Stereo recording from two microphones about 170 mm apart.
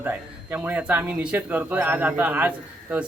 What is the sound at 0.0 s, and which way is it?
Speech, 10° right (ahead or behind).